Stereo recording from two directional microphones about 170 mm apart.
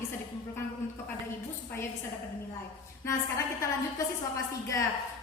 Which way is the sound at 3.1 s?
20° left (ahead or behind).